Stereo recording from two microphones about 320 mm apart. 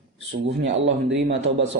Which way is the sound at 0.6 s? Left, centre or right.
Right.